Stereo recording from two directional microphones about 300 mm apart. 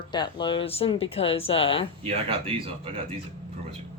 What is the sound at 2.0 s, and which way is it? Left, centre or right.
Speech, centre.